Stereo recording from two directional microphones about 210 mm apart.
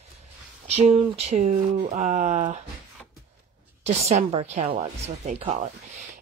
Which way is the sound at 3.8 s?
30° right (ahead or behind).